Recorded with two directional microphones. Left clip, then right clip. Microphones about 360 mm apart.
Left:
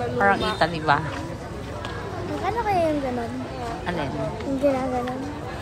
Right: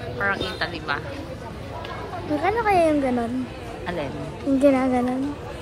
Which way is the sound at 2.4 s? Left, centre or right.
Centre.